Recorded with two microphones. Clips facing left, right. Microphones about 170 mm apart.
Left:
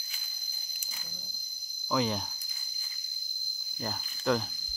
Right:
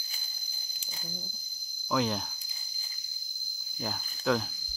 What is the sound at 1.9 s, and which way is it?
Speech, centre (ahead or behind).